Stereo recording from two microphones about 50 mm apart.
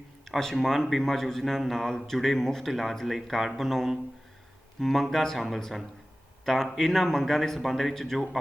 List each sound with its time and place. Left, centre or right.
0.3 s speech: centre